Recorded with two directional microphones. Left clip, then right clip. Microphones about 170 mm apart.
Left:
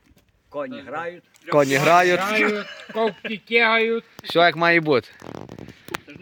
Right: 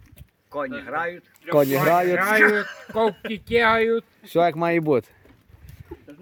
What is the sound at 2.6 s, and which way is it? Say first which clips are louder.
Speech: right 1 dB; 10° right (ahead or behind).